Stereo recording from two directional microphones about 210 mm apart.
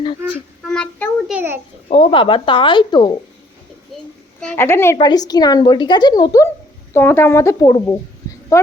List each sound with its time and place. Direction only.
0.7 s child singing: 5° left (ahead or behind)
1.3 s a sound: 10° right (ahead or behind)
1.9 s speech: 25° left (ahead or behind)
4.4 s a woman's voice: 10° left (ahead or behind)